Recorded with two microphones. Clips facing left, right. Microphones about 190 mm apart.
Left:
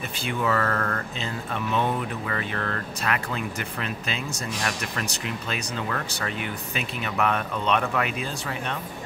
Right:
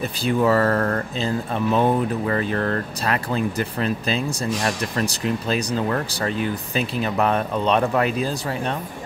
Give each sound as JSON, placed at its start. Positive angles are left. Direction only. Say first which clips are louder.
{"t": 0.2, "sound": "speech", "louder": "right 7 dB", "side_deg": -35}